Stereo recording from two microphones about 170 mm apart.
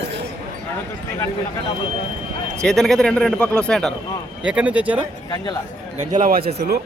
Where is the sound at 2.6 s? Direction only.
5° left (ahead or behind).